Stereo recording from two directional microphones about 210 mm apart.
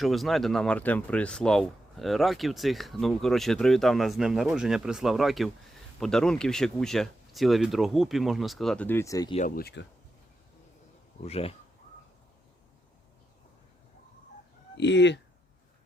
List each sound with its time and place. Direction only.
0.0 s speech: centre (ahead or behind); by 9.3 s 15° left (ahead or behind)
9.6 s speech: 50° left (ahead or behind)
11.2 s speech: 30° left (ahead or behind)
14.8 s speech: 55° left (ahead or behind)